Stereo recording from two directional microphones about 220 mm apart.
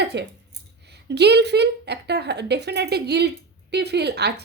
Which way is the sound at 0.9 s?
50° right (ahead or behind).